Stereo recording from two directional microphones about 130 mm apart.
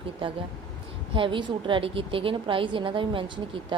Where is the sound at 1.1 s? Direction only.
40° right (ahead or behind).